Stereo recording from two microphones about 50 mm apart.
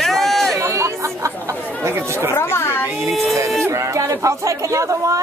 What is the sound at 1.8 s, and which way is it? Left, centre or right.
Speech, right.